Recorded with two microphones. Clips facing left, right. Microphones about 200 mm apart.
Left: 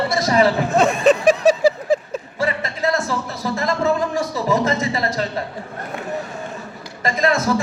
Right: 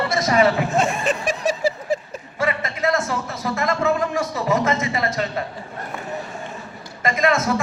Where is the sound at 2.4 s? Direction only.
35° left (ahead or behind).